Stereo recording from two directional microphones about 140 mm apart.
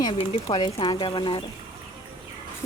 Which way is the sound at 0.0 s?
35° left (ahead or behind).